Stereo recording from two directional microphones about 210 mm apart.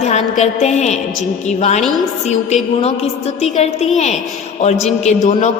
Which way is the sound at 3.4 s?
30° left (ahead or behind).